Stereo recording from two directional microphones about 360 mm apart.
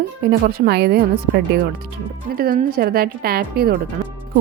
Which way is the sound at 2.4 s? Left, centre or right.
Right.